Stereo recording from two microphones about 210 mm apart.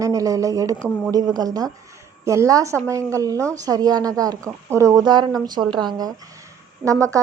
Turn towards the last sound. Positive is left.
turn(degrees=-15)  # may be behind; listen again after turning